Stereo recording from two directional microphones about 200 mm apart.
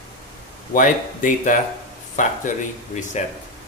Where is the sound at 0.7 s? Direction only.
40° left (ahead or behind).